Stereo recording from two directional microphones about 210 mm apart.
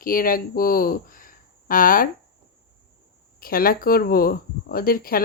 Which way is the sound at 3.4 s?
45° left (ahead or behind).